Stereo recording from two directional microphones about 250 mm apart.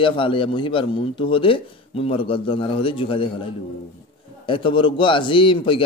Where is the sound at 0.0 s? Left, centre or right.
Left.